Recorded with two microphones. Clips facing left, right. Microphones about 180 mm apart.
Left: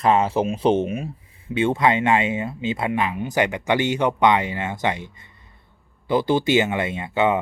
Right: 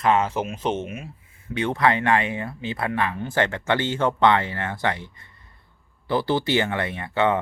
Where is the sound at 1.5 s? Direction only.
20° left (ahead or behind).